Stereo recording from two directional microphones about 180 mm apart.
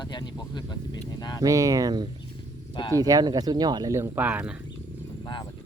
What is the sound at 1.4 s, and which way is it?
Speech, 20° right (ahead or behind).